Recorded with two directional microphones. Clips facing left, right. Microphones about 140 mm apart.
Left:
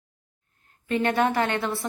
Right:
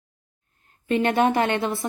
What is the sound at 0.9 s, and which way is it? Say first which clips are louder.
A woman's voice: right 3 dB; 20° right (ahead or behind).